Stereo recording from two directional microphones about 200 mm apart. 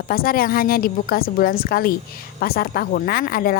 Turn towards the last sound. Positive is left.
turn(degrees=45)  # may be behind; listen again after turning